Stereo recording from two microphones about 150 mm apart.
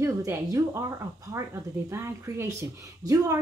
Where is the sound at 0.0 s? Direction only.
20° right (ahead or behind).